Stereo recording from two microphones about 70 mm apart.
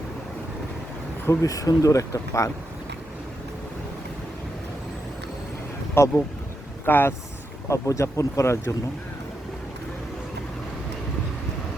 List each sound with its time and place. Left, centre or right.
1.4 s speech: left
5.9 s speech: left
7.7 s speech: left